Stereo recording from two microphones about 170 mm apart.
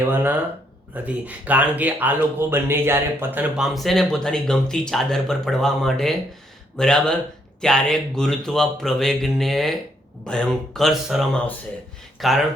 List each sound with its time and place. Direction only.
0.0 s speech: 10° right (ahead or behind)